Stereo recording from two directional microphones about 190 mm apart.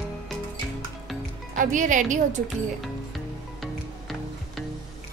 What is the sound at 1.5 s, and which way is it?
Speech, 45° right (ahead or behind).